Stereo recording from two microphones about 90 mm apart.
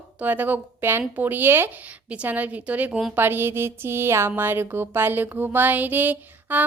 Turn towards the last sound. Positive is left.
turn(degrees=-20)  # may be behind; listen again after turning